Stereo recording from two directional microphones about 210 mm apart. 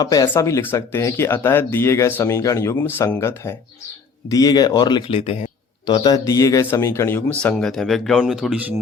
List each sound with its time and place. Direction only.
0.0 s speech: 15° left (ahead or behind); by 8.6 s centre (ahead or behind)